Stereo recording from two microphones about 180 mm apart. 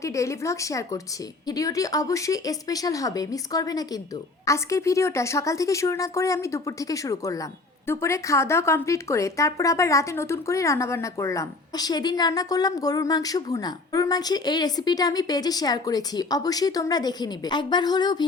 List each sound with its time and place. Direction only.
0.0 s a woman's voice: 15° left (ahead or behind)